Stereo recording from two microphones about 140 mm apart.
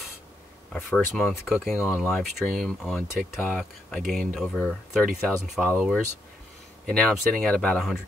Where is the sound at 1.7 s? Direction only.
20° left (ahead or behind).